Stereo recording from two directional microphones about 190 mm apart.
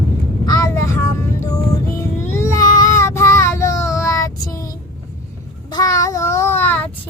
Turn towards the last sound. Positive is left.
turn(degrees=10)  # may be behind; listen again after turning